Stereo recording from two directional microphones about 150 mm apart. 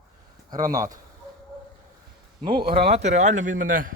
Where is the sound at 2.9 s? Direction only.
50° right (ahead or behind).